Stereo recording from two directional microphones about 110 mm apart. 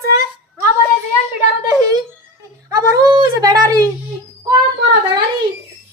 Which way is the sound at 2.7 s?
35° right (ahead or behind).